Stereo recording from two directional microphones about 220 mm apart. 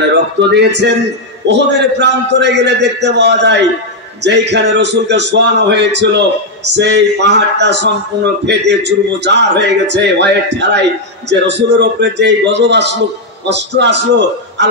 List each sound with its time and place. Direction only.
0.6 s a man's voice: 50° right (ahead or behind)